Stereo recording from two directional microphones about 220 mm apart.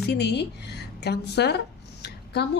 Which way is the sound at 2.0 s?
50° left (ahead or behind).